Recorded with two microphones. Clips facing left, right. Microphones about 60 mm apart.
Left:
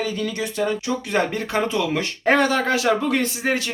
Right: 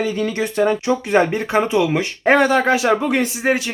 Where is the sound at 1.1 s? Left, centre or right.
Right.